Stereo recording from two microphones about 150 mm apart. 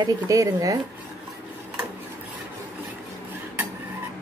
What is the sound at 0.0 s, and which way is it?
Speech, 20° right (ahead or behind).